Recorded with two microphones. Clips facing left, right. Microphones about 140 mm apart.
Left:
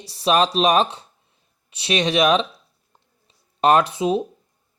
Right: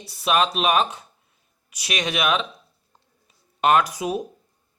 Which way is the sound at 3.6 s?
35° left (ahead or behind).